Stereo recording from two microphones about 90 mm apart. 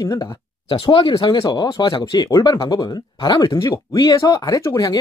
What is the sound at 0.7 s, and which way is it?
Speech, 90° left.